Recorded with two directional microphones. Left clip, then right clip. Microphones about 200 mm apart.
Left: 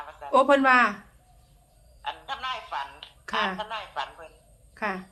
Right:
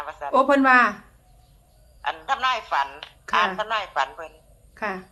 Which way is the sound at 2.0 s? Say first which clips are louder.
Right 9 dB; 50° right (ahead or behind).